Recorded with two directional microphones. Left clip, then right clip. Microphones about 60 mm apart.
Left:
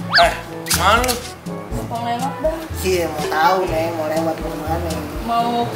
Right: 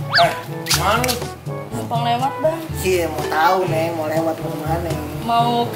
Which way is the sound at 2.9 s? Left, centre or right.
Centre.